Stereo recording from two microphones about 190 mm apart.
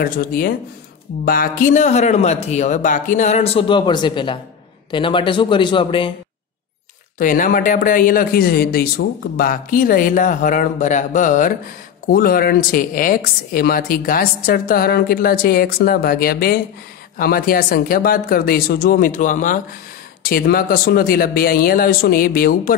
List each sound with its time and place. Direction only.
0.0 s a woman's voice: 50° left (ahead or behind); by 6.1 s 25° left (ahead or behind)
7.2 s a woman's voice: 45° left (ahead or behind)